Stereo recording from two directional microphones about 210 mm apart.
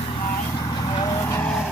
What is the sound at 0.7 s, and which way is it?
Vehicle, 25° left (ahead or behind).